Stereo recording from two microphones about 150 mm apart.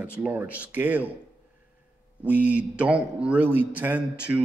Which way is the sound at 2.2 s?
10° right (ahead or behind).